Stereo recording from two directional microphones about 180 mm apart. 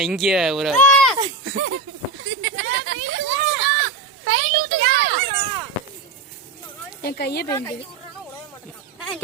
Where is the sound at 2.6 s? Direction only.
85° right.